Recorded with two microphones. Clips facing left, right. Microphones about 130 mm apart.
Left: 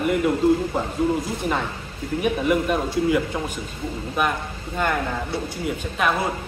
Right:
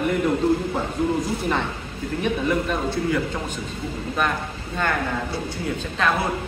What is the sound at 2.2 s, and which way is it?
Speech, 10° left (ahead or behind).